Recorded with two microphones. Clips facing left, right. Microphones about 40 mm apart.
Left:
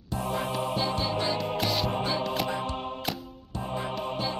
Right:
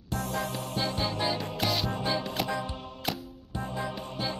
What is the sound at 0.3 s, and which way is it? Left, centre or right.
Music, left.